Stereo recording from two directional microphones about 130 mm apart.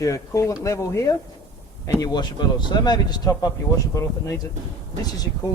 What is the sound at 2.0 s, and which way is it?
Speech, 35° left (ahead or behind).